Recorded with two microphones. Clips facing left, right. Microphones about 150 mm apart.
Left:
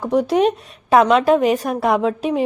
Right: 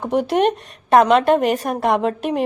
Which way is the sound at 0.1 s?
Centre (ahead or behind).